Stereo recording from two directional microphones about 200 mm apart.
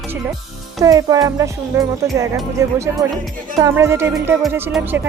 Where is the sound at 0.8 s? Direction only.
15° right (ahead or behind).